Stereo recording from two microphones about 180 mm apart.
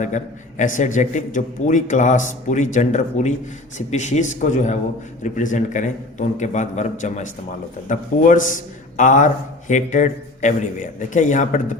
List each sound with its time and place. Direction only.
0.0 s a man's voice: 45° left (ahead or behind)